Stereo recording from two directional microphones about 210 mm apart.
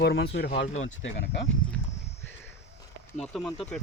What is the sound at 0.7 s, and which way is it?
Speech, 65° left (ahead or behind).